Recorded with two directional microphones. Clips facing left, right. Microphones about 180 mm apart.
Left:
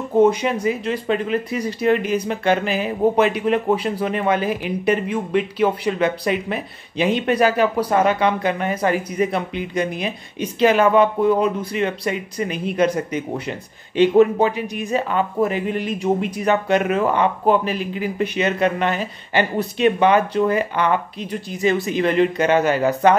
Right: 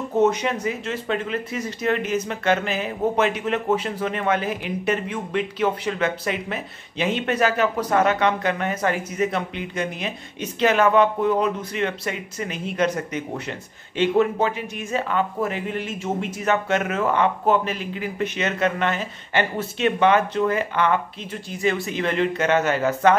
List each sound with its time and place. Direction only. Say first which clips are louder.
0.2 s speech: left 4 dB; 10° left (ahead or behind)